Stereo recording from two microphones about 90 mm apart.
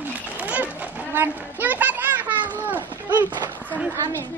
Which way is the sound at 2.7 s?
20° right (ahead or behind).